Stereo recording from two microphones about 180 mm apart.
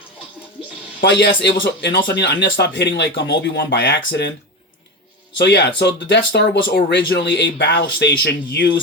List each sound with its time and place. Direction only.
1.2 s speech: 65° left (ahead or behind)
5.4 s speech: 70° left (ahead or behind)